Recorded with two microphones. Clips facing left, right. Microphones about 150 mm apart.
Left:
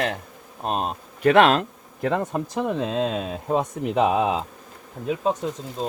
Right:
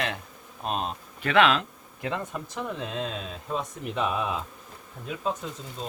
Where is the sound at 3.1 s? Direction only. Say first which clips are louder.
Left 8 dB; 50° left (ahead or behind); by 4.1 s 80° left.